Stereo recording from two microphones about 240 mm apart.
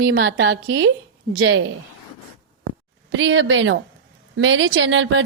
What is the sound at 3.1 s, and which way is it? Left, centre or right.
A woman's voice, right.